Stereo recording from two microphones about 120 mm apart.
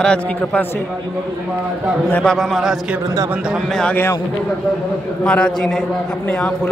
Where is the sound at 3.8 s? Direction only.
10° left (ahead or behind).